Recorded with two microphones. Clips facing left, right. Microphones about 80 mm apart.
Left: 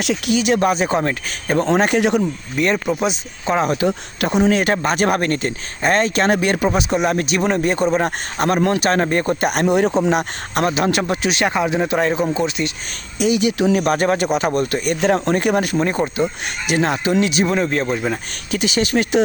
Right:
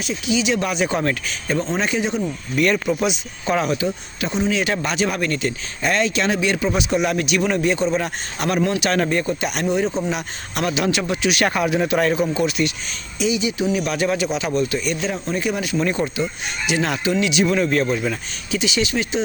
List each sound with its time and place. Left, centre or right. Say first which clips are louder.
0.0 s speech: left 4 dB; left
0.3 s speech: left 4 dB; left
2.6 s speech: even; left
3.8 s speech: left 5 dB; left
9.2 s speech: left 5 dB; left
10.0 s speech: left 7 dB; left
11.3 s speech: left 1 dB; left
13.1 s speech: left 4 dB; left
15.8 s speech: left 2 dB; left
16.2 s speech: left 3 dB; left
18.5 s speech: left 3 dB; left